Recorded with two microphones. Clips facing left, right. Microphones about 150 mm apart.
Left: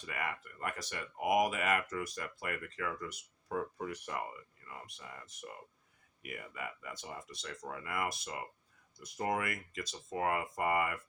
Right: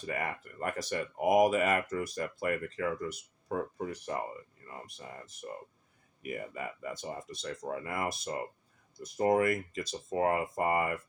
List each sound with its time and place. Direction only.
0.0 s speech: 40° right (ahead or behind)
7.3 s speech: 25° right (ahead or behind)
8.2 s speech: 45° right (ahead or behind)
9.7 s speech: 30° right (ahead or behind)